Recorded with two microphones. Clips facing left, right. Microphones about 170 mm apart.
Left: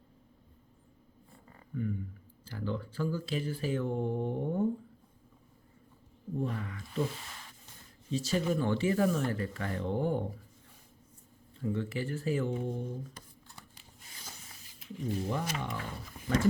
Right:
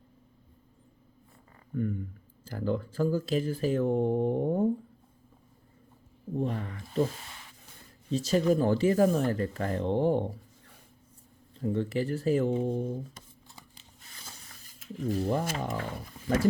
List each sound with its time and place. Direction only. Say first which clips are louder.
1.7 s speech: right 4 dB; 45° right (ahead or behind)
6.3 s speech: right 4 dB; 35° right (ahead or behind)
8.1 s speech: right 6 dB; 40° right (ahead or behind)
11.5 s speech: right 5 dB; 35° right (ahead or behind)
14.8 s speech: right 5 dB; 45° right (ahead or behind)